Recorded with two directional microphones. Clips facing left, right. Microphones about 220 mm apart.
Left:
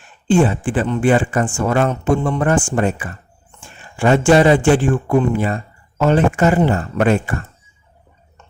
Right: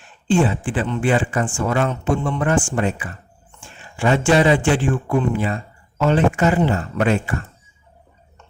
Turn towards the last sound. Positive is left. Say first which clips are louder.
# left 3 dB
turn(degrees=50)  # may be behind; listen again after turning